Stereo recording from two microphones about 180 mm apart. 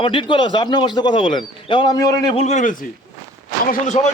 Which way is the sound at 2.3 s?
40° left (ahead or behind).